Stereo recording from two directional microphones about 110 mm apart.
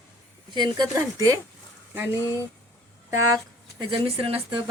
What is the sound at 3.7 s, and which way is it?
Speech, 55° right (ahead or behind).